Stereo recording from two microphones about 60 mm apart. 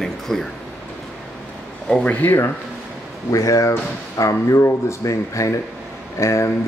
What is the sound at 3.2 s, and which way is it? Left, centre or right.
Speech, left.